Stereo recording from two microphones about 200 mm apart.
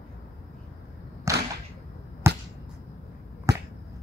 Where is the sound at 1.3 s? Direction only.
15° right (ahead or behind).